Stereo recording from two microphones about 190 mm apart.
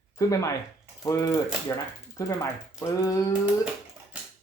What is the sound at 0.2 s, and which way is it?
Speech, 15° left (ahead or behind).